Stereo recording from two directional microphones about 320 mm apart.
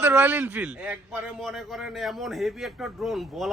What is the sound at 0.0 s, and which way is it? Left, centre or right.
A man's voice, centre.